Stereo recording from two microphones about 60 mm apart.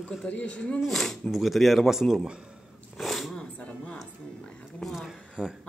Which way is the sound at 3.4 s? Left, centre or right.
Centre.